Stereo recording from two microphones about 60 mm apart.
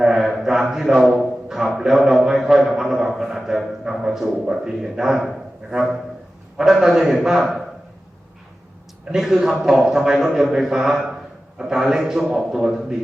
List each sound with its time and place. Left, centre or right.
0.0 s a sound: centre
3.8 s a man's voice: centre
6.6 s a man's voice: centre
9.1 s a man's voice: centre